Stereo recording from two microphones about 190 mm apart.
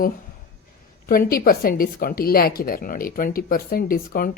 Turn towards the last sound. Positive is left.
turn(degrees=50)  # may be behind; listen again after turning